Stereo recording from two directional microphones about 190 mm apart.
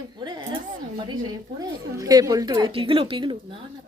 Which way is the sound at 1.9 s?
20° right (ahead or behind).